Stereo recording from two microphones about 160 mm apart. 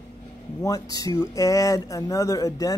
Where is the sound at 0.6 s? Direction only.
20° left (ahead or behind).